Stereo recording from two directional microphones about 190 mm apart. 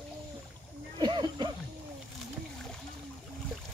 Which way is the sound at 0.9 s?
25° right (ahead or behind).